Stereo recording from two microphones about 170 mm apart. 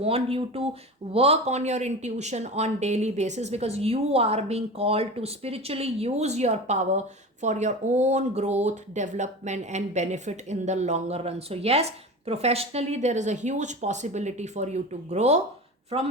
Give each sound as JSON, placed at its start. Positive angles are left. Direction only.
{"t": 0.0, "sound": "speech", "side_deg": -35}